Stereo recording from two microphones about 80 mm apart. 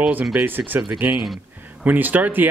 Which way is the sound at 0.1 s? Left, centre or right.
Right.